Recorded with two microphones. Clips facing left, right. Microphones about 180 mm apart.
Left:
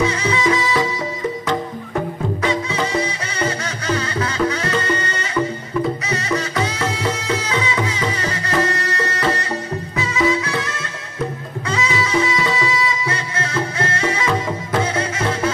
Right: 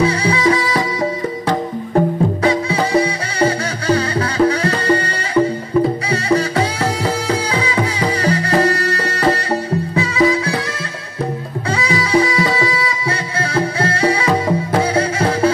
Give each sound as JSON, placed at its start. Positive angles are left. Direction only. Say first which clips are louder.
{"t": 0.0, "sound": "music", "louder": "right 3 dB", "side_deg": -30}
{"t": 2.0, "sound": "music", "louder": "right 7 dB", "side_deg": -35}
{"t": 11.7, "sound": "music", "louder": "right 4 dB", "side_deg": -30}